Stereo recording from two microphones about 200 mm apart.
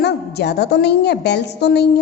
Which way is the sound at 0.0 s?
55° left (ahead or behind).